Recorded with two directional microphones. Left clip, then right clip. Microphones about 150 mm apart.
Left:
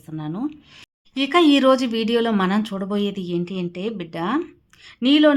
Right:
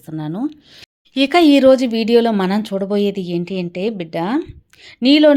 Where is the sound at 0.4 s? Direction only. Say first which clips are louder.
Right 4 dB; 20° right (ahead or behind).